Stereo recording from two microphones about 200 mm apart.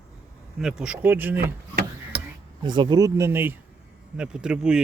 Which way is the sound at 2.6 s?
20° right (ahead or behind).